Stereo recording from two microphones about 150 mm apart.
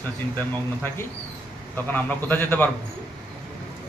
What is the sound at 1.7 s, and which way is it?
Speech, 10° left (ahead or behind).